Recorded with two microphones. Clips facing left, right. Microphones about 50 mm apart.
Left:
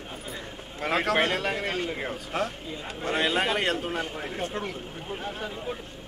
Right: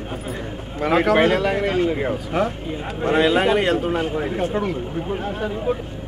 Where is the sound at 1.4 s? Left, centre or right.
Right.